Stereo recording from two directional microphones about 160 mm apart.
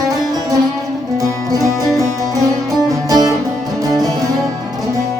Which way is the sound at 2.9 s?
25° right (ahead or behind).